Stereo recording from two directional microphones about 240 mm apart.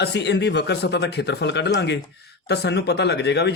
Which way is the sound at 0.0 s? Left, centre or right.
Left.